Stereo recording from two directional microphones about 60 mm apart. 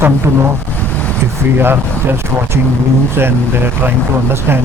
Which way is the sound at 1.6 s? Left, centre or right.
Right.